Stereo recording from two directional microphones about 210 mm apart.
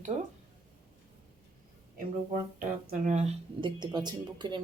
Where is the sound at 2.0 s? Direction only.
40° right (ahead or behind).